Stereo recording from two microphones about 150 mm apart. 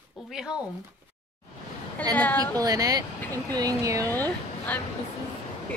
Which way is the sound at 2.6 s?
25° right (ahead or behind).